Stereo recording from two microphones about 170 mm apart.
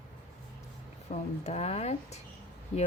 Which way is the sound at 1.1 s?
40° left (ahead or behind).